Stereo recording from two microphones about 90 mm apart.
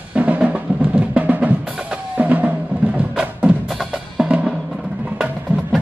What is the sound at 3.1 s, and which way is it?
Music, 10° right (ahead or behind).